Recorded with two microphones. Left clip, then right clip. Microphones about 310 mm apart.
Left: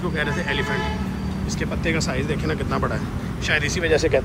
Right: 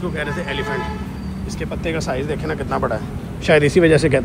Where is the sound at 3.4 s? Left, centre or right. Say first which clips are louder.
Right 9 dB; centre.